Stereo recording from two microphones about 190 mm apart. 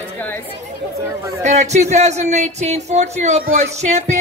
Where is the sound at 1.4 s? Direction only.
35° right (ahead or behind).